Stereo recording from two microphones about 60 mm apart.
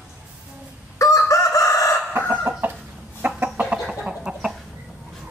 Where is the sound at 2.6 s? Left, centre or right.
Right.